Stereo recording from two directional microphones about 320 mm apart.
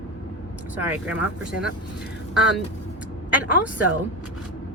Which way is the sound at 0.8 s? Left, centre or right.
Centre.